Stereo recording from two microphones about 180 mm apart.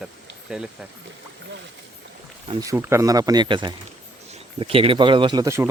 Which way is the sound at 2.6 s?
15° right (ahead or behind).